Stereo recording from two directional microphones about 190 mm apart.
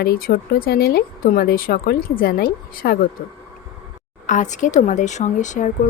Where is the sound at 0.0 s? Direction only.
55° left (ahead or behind).